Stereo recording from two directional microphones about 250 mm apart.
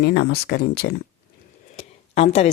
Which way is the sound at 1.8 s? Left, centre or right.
Left.